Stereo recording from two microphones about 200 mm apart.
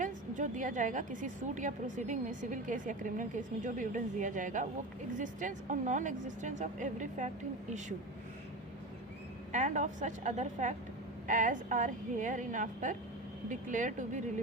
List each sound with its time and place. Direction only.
0.0 s a woman's voice: 40° right (ahead or behind)
9.5 s a woman's voice: 40° right (ahead or behind)